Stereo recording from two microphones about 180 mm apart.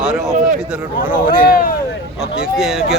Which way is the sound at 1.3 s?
50° left (ahead or behind).